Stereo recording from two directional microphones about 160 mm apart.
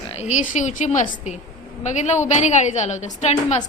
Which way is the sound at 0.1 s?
45° left (ahead or behind).